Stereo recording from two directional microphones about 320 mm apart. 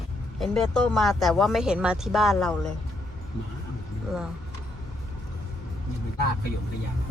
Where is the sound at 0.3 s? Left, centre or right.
Centre.